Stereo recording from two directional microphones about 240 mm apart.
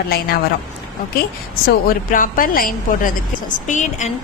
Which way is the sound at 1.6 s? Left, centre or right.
Left.